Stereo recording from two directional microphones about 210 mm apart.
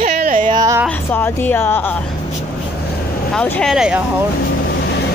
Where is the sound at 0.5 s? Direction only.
15° right (ahead or behind).